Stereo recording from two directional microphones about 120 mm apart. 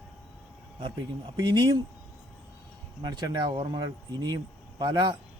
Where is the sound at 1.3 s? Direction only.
35° right (ahead or behind).